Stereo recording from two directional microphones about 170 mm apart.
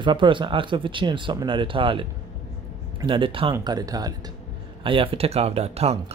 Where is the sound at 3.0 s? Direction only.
30° right (ahead or behind).